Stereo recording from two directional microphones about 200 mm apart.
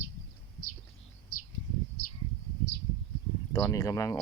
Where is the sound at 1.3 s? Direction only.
90° left.